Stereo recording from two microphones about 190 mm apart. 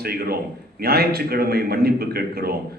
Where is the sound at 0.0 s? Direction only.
55° right (ahead or behind).